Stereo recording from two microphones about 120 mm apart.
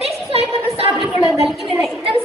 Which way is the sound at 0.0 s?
55° right (ahead or behind).